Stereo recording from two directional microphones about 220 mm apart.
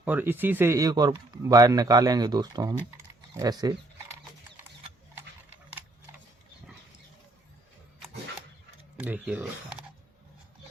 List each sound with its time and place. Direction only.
0.0 s speech: 10° right (ahead or behind)
3.3 s a sound: 15° right (ahead or behind)
9.0 s speech: 5° right (ahead or behind)